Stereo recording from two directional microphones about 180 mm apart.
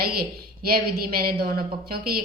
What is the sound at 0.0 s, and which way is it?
A woman's voice, 60° right (ahead or behind).